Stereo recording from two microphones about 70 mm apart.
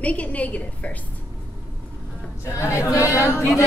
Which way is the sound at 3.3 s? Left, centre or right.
Left.